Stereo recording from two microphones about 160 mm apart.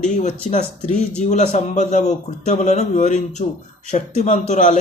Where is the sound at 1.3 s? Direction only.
45° left (ahead or behind).